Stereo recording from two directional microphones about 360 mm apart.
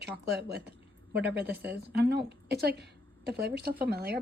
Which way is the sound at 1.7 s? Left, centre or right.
Right.